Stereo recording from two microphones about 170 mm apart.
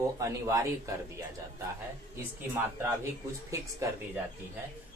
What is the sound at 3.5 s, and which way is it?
Speech, 20° right (ahead or behind).